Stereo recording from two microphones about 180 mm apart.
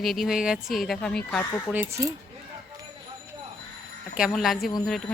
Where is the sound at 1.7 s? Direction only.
15° right (ahead or behind).